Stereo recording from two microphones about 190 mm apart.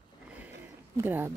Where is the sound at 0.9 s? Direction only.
10° right (ahead or behind).